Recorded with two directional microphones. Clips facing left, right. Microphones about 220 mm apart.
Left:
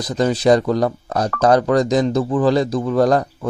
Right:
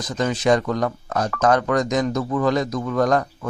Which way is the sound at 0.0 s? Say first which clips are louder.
Left 5 dB; 35° left (ahead or behind).